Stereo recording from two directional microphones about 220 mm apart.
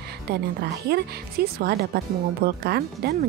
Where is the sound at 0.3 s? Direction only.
45° right (ahead or behind).